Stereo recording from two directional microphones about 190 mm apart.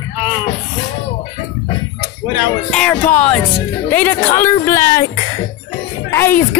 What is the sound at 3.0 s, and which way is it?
Speech, 40° left (ahead or behind).